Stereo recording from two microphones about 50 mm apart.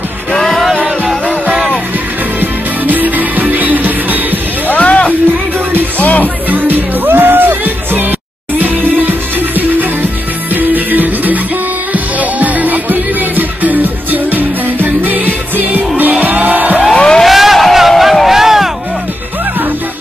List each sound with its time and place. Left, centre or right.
0.3 s music: centre
2.4 s music: right
4.6 s music: left
6.2 s music: right
10.5 s music: right
16.9 s a sound: centre
17.2 s a sound: centre